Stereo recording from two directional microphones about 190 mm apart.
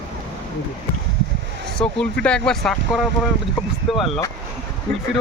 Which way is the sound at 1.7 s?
5° left (ahead or behind).